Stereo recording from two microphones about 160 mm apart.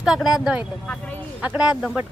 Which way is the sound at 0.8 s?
5° left (ahead or behind).